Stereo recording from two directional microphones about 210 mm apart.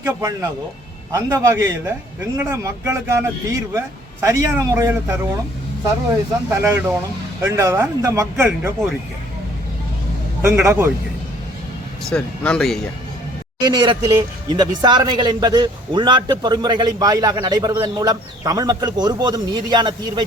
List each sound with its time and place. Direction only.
0.0 s speech: 15° right (ahead or behind)
6.5 s speech: 10° right (ahead or behind)
10.4 s speech: 5° right (ahead or behind)
12.1 s speech: 5° left (ahead or behind)
13.6 s a man's voice: 20° right (ahead or behind)